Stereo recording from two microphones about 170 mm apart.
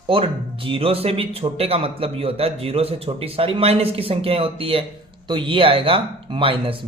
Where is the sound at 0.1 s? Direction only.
30° right (ahead or behind).